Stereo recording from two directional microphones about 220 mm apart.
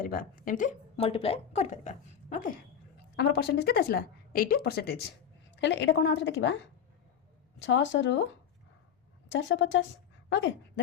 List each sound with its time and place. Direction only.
0.0 s speech: 40° left (ahead or behind)
1.0 s a woman's voice: 25° left (ahead or behind)
3.2 s a woman's voice: 50° left (ahead or behind)
7.6 s a woman's voice: 55° left (ahead or behind)
9.3 s a woman's voice: 60° left (ahead or behind)